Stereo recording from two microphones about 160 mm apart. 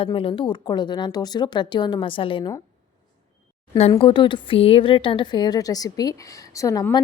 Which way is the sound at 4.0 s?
30° left (ahead or behind).